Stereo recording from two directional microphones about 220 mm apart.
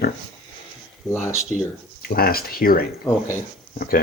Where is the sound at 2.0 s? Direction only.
45° left (ahead or behind).